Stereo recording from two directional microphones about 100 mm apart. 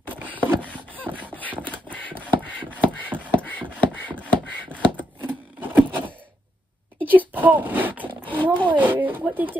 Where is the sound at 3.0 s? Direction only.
15° right (ahead or behind).